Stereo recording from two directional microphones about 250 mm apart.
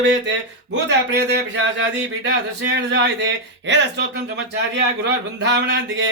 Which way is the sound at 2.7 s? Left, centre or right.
Right.